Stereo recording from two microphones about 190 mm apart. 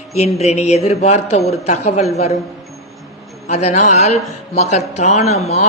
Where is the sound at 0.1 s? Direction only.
35° left (ahead or behind).